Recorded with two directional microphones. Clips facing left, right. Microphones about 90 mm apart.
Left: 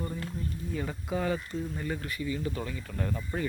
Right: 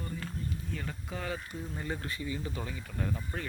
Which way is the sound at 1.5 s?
15° right (ahead or behind).